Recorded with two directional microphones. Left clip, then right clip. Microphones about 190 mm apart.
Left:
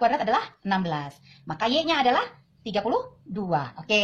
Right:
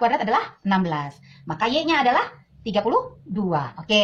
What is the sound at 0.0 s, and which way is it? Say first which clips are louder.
A woman's voice: right 2 dB; 45° left (ahead or behind).